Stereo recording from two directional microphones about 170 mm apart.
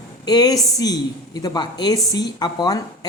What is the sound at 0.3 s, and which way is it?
A woman's voice, 25° left (ahead or behind).